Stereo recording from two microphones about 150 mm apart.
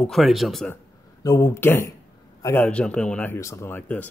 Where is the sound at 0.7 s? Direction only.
20° left (ahead or behind).